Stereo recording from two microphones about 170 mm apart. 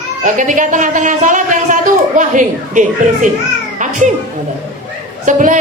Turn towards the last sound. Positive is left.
turn(degrees=-50)  # may be behind; listen again after turning